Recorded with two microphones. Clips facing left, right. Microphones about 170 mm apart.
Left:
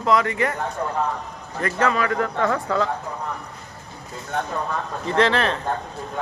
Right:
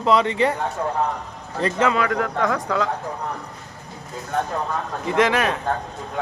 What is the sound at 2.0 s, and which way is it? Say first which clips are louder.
Speech: right 1 dB; 5° right (ahead or behind).